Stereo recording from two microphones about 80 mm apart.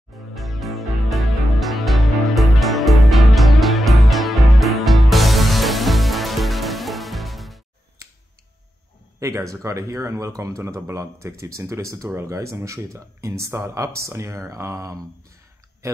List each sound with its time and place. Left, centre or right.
0.3 s music: centre
9.2 s speech: right